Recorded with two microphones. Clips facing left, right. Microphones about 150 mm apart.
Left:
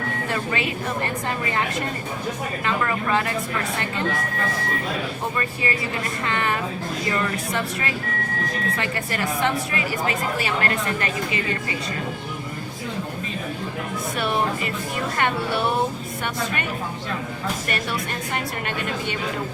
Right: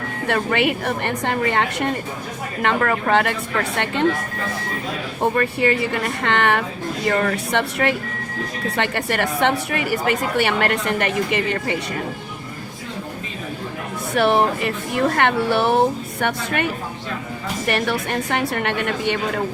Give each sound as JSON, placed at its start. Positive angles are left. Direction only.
{"t": 0.3, "sound": "a woman's voice", "side_deg": -70}
{"t": 5.2, "sound": "a woman's voice", "side_deg": -65}
{"t": 14.2, "sound": "speech", "side_deg": -60}
{"t": 17.7, "sound": "speech", "side_deg": -65}